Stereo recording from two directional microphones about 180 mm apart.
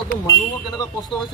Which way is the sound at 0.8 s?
20° left (ahead or behind).